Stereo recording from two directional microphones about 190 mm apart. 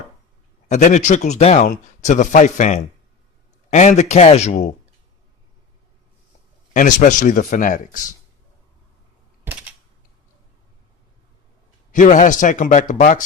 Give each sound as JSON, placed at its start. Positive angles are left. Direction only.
{"t": 0.7, "sound": "speech", "side_deg": 40}
{"t": 6.7, "sound": "a man's voice", "side_deg": 40}
{"t": 11.9, "sound": "a man's voice", "side_deg": 40}